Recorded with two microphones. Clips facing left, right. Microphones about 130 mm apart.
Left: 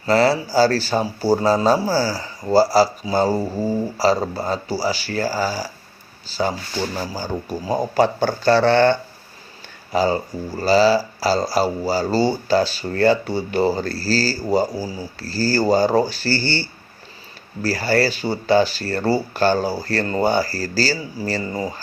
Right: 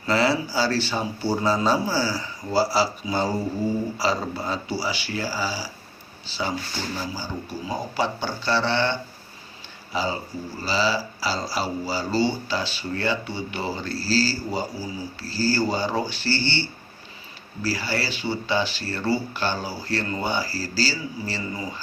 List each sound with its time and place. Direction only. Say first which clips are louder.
0.0 s speech: left 5 dB; 40° left (ahead or behind)